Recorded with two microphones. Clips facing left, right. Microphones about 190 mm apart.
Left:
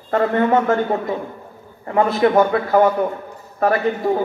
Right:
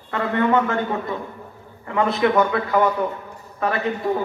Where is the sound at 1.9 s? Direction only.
40° left (ahead or behind).